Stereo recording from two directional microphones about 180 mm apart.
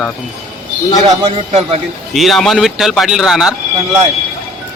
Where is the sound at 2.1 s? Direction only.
Centre (ahead or behind).